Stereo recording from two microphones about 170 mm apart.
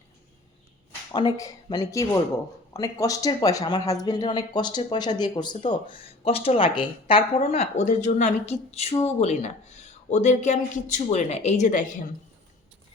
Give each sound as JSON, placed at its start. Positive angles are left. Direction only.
{"t": 1.1, "sound": "speech", "side_deg": 20}